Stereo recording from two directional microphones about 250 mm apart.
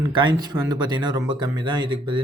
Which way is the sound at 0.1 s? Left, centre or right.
Centre.